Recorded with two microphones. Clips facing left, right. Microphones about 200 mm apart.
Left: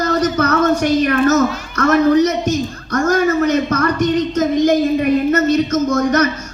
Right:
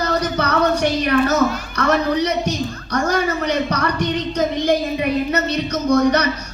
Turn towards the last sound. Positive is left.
turn(degrees=50)  # may be behind; listen again after turning